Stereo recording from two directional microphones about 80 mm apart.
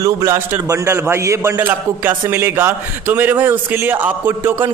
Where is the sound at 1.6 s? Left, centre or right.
Right.